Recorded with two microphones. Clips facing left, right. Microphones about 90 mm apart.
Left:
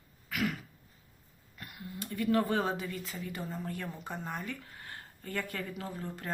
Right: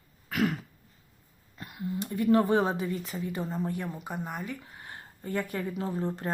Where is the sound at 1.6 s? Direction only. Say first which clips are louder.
Right 9 dB; 25° right (ahead or behind).